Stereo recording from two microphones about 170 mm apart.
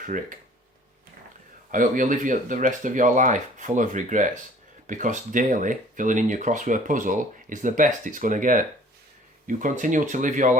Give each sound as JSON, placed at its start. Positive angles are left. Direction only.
{"t": 0.0, "sound": "speech", "side_deg": -50}
{"t": 1.7, "sound": "speech", "side_deg": -50}